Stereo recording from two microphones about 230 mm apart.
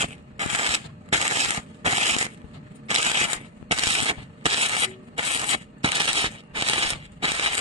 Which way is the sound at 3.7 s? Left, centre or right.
Right.